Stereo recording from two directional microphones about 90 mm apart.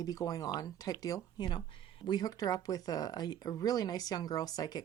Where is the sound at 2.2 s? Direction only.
45° left (ahead or behind).